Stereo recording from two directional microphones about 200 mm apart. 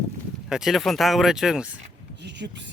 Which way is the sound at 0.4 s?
Centre (ahead or behind).